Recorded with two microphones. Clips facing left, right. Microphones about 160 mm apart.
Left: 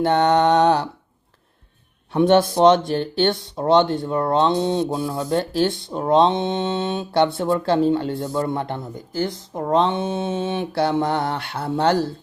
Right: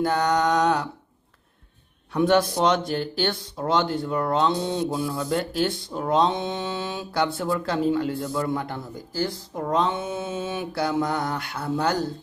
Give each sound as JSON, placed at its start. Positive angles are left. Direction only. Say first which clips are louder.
{"t": 0.0, "sound": "speech", "louder": "left 5 dB", "side_deg": 25}
{"t": 2.1, "sound": "speech", "louder": "left 4 dB", "side_deg": 25}